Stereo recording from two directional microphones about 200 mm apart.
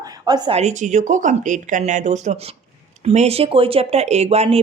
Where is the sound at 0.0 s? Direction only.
20° right (ahead or behind).